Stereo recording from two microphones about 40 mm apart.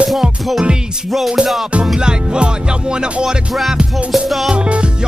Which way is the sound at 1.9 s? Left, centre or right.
Right.